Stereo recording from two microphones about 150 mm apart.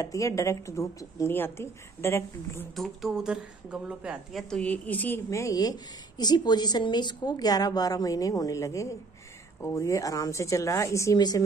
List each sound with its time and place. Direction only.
0.0 s a woman's voice: 20° left (ahead or behind)
2.7 s a woman's voice: centre (ahead or behind); by 11.4 s 25° left (ahead or behind)